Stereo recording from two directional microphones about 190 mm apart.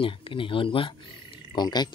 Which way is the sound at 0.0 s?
25° left (ahead or behind).